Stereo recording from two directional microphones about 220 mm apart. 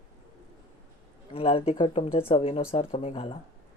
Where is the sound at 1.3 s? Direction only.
25° left (ahead or behind).